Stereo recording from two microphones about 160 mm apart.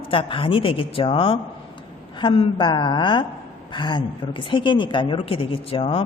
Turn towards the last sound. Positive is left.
turn(degrees=35)  # may be behind; listen again after turning